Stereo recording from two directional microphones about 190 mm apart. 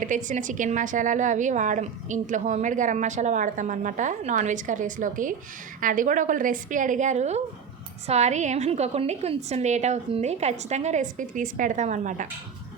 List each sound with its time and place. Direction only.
0.0 s a woman's voice: 40° right (ahead or behind)